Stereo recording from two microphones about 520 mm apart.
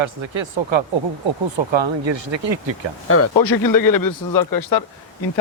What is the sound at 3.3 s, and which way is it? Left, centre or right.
Speech, left.